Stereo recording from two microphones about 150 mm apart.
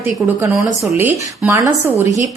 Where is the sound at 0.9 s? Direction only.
15° right (ahead or behind).